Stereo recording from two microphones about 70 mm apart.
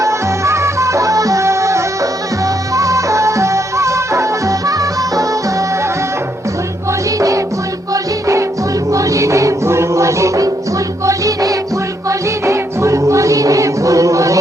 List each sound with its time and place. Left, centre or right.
0.0 s music: right
7.2 s music: right
8.9 s music: right